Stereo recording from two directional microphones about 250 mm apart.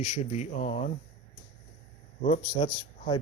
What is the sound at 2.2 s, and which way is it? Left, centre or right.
Speech, left.